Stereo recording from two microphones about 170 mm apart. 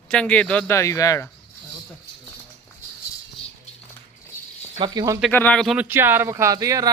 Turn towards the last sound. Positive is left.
turn(degrees=-20)  # may be behind; listen again after turning